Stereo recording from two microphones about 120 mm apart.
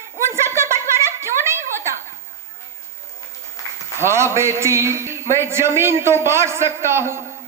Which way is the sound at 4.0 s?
20° right (ahead or behind).